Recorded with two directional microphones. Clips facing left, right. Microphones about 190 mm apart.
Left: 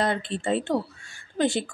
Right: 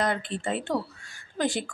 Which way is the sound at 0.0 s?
25° left (ahead or behind).